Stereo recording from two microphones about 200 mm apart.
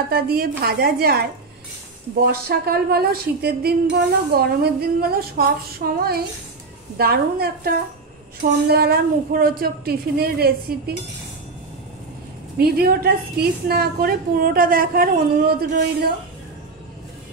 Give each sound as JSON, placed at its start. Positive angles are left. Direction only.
{"t": 0.1, "sound": "a woman's voice", "side_deg": -50}
{"t": 2.4, "sound": "a woman's voice", "side_deg": -50}
{"t": 12.5, "sound": "a woman's voice", "side_deg": -50}